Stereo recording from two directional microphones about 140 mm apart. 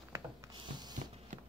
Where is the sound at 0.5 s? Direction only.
35° right (ahead or behind).